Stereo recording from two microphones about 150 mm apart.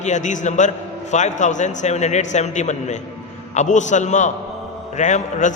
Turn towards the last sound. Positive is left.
turn(degrees=55)  # may be behind; listen again after turning